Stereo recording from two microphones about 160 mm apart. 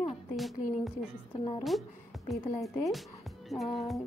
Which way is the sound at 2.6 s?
Centre (ahead or behind).